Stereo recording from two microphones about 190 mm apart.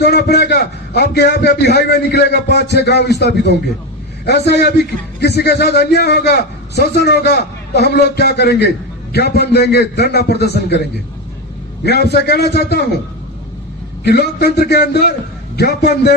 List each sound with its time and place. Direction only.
0.0 s a man's voice: 60° left (ahead or behind)
11.9 s a man's voice: 55° left (ahead or behind)
14.0 s a man's voice: 60° left (ahead or behind)